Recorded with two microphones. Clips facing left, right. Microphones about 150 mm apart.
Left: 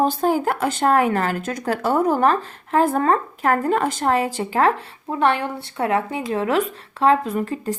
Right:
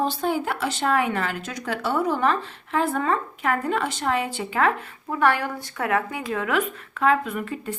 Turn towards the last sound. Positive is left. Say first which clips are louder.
# left 6 dB
turn(degrees=35)  # may be behind; listen again after turning